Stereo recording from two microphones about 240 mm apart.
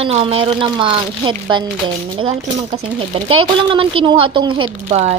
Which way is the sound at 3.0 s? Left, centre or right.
Right.